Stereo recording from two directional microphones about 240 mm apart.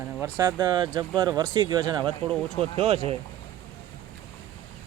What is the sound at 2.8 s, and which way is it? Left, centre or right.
Speech, right.